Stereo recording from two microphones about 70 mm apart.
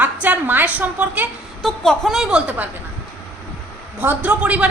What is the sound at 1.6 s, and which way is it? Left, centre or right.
Speech, centre.